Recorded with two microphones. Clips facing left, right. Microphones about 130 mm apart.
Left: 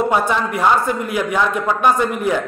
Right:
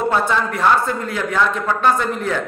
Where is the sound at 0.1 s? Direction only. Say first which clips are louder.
Left 1 dB; 15° left (ahead or behind).